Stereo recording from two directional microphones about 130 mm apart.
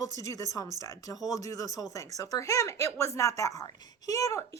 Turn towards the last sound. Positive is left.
turn(degrees=25)  # may be behind; listen again after turning